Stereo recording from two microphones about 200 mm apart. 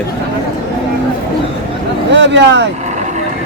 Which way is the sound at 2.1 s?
60° right (ahead or behind).